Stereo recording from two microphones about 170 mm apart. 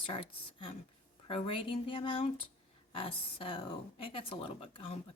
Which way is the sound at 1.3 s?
35° left (ahead or behind).